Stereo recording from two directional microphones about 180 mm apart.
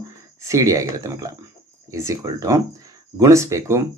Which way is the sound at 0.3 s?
15° right (ahead or behind).